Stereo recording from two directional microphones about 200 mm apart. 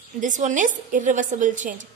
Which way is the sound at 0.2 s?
40° right (ahead or behind).